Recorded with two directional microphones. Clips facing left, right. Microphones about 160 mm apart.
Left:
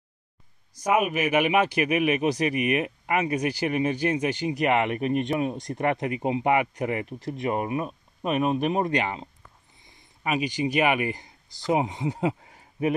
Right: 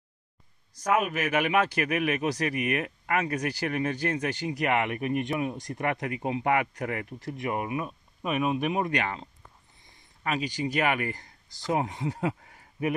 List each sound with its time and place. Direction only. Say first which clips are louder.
0.7 s speech: left 3 dB; 15° left (ahead or behind)